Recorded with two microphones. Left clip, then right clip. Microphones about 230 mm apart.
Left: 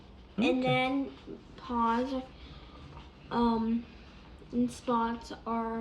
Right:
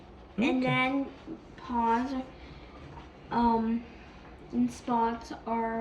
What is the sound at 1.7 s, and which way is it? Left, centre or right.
Speech, right.